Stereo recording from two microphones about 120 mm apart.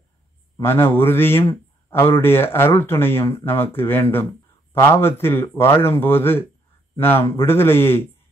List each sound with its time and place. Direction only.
0.6 s a man's voice: 20° left (ahead or behind)